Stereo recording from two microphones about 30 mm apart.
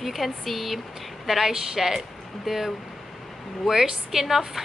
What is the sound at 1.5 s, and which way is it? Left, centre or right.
A woman's voice, centre.